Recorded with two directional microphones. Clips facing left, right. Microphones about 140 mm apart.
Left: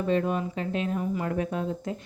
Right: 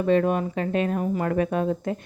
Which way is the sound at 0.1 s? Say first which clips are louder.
Right 6 dB; 65° right (ahead or behind).